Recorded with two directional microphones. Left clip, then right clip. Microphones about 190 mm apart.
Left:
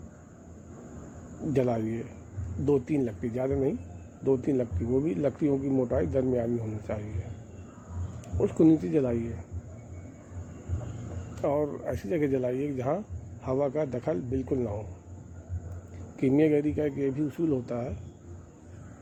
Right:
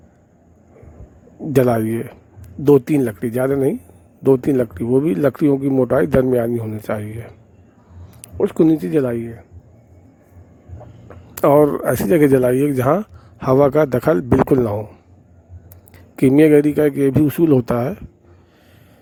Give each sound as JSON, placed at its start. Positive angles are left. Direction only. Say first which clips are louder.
{"t": 1.5, "sound": "speech", "louder": "right 12 dB", "side_deg": -55}
{"t": 8.4, "sound": "speech", "louder": "right 8 dB", "side_deg": -55}
{"t": 11.3, "sound": "speech", "louder": "right 16 dB", "side_deg": -60}
{"t": 16.1, "sound": "speech", "louder": "right 13 dB", "side_deg": -55}